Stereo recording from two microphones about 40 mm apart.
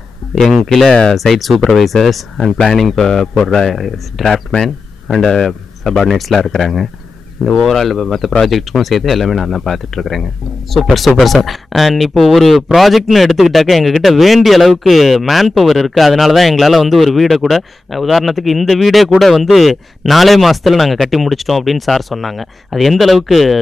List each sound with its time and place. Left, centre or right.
0.8 s speech: left
1.1 s a man's voice: centre